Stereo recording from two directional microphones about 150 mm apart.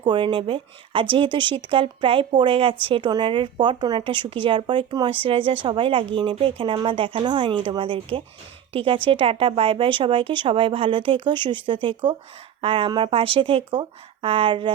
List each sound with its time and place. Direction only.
0.0 s speech: 30° right (ahead or behind)